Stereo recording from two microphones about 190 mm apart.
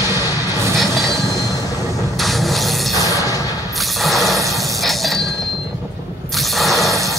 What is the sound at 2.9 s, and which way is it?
Music, 15° right (ahead or behind).